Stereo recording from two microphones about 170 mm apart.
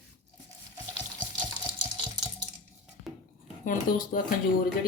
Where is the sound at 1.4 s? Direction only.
25° right (ahead or behind).